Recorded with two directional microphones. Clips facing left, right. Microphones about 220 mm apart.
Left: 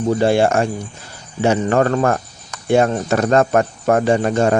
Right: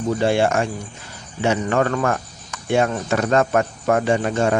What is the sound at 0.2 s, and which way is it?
A man's voice, 40° left (ahead or behind).